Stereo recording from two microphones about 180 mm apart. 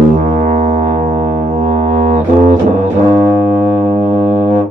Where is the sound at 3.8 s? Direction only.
45° right (ahead or behind).